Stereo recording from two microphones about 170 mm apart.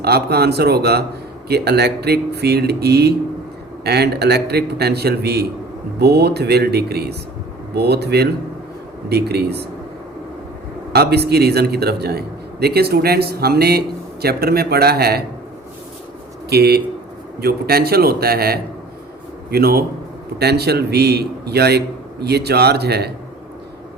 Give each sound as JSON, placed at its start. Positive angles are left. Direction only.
{"t": 0.0, "sound": "a man's voice", "side_deg": -70}
{"t": 10.9, "sound": "a man's voice", "side_deg": -75}
{"t": 16.5, "sound": "a man's voice", "side_deg": -70}